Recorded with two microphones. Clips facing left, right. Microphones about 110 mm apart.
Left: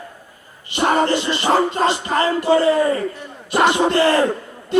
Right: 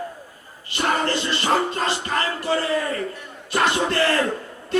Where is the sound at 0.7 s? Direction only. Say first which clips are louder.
Left 6 dB; 20° left (ahead or behind).